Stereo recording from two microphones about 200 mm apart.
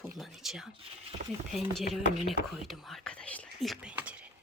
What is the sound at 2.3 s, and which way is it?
Whispering, centre (ahead or behind).